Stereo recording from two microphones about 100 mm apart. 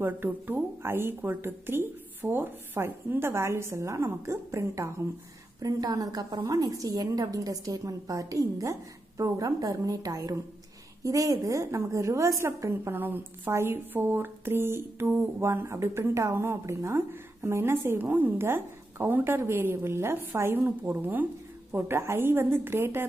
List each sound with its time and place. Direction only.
0.0 s a woman's voice: 20° right (ahead or behind)